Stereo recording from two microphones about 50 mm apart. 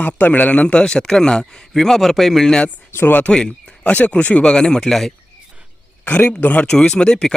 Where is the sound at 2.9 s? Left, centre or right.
Left.